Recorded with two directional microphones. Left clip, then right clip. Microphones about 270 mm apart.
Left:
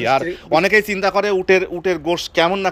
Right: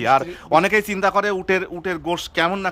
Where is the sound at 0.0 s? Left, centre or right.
Centre.